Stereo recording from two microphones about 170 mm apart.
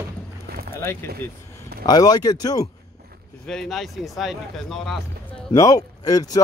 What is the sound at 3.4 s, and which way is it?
Speech, centre (ahead or behind).